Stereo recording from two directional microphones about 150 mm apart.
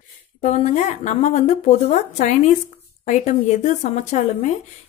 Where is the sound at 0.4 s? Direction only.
50° left (ahead or behind).